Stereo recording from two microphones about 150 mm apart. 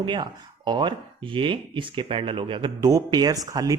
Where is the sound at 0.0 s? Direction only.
30° right (ahead or behind).